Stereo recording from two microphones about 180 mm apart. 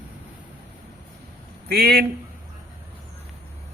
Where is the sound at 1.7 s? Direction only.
60° right (ahead or behind).